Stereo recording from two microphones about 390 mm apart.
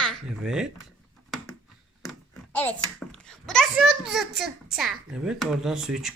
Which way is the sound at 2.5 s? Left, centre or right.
Centre.